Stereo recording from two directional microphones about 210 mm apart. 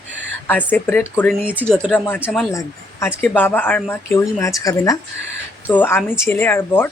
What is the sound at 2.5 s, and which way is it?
Speech, 15° left (ahead or behind).